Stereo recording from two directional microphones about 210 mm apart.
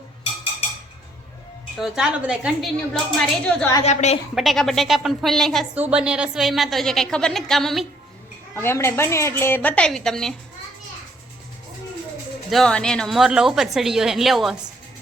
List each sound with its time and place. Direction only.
1.8 s a woman's voice: 5° right (ahead or behind)
3.8 s a woman's voice: 30° left (ahead or behind)
4.4 s a woman's voice: centre (ahead or behind)
8.5 s a woman's voice: 10° left (ahead or behind)
12.5 s a woman's voice: centre (ahead or behind)